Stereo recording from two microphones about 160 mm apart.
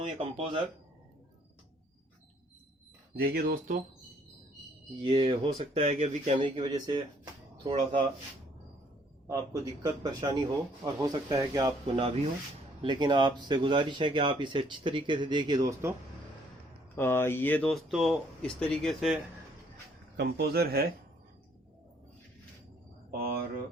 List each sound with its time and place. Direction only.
0.0 s speech: 35° right (ahead or behind)
3.2 s speech: 75° right (ahead or behind)
5.0 s speech: 35° right (ahead or behind)
9.2 s speech: 20° right (ahead or behind)
11.9 s speech: 40° right (ahead or behind)
12.8 s speech: 30° right (ahead or behind)
16.9 s speech: 15° left (ahead or behind)
20.1 s speech: 90° right; by 20.9 s 70° right (ahead or behind)